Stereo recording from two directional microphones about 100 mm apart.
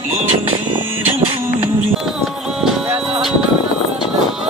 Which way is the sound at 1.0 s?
65° right (ahead or behind).